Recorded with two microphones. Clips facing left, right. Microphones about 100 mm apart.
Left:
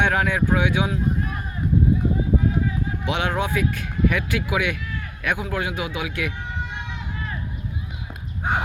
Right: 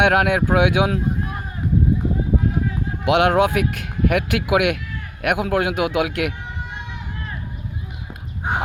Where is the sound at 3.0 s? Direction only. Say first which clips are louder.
Right 10 dB; 60° right (ahead or behind).